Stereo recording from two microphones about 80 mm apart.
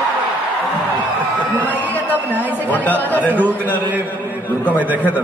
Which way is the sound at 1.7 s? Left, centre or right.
Left.